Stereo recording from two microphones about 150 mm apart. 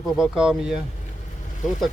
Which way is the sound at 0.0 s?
5° right (ahead or behind).